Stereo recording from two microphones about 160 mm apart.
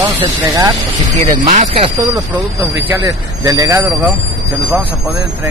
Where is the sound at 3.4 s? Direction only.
20° right (ahead or behind).